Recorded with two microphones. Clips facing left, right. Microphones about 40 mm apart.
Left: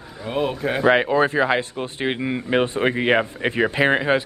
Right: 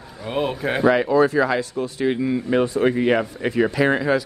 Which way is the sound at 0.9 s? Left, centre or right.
Left.